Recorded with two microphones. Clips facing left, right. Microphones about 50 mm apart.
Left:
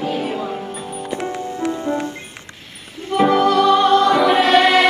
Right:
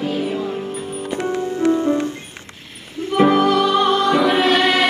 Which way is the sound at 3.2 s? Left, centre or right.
Centre.